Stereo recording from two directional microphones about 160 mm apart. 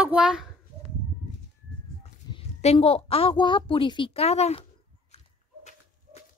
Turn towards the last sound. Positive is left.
turn(degrees=45)  # may be behind; listen again after turning